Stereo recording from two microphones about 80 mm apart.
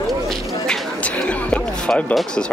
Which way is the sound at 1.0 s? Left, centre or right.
Centre.